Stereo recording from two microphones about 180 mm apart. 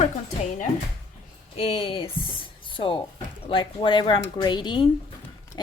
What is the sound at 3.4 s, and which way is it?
A woman's voice, 30° left (ahead or behind).